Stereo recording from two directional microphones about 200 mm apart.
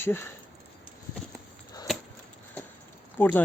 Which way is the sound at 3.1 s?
10° left (ahead or behind).